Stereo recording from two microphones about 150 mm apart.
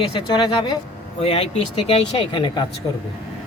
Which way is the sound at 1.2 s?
40° left (ahead or behind).